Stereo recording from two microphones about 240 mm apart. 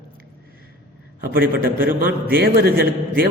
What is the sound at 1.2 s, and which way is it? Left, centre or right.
A man's voice, right.